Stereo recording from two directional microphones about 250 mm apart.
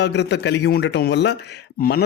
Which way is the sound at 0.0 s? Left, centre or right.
Left.